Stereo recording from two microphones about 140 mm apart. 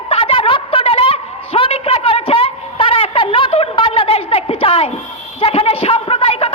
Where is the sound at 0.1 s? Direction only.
40° left (ahead or behind).